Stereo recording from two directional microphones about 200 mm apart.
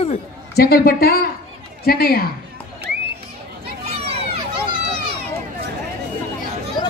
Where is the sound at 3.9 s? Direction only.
30° right (ahead or behind).